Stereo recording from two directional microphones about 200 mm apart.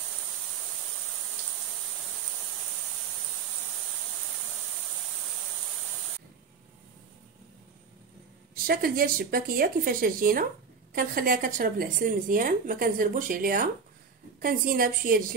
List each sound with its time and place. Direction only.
8.6 s speech: 45° right (ahead or behind)